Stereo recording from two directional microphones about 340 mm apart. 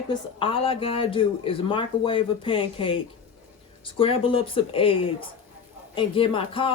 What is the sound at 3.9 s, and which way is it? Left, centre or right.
A woman's voice, centre.